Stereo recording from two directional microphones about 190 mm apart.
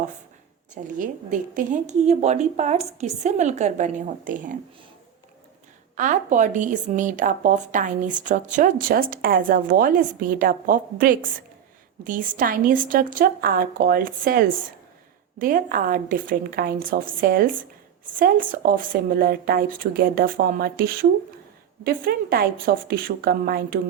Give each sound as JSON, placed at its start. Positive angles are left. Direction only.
{"t": 0.7, "sound": "a woman's voice", "side_deg": -40}
{"t": 6.0, "sound": "a woman's voice", "side_deg": -40}